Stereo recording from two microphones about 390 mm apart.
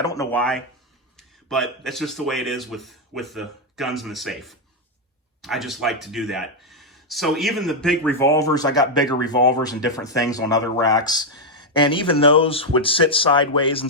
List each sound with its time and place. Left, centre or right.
0.0 s speech: centre